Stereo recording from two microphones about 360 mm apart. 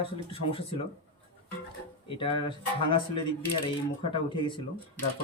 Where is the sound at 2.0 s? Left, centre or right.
Centre.